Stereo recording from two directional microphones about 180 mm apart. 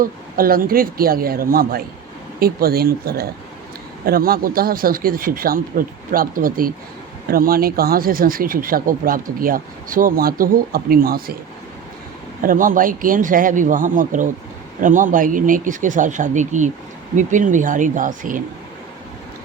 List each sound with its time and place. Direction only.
0.0 s a man's voice: 55° right (ahead or behind)
12.4 s speech: 50° right (ahead or behind)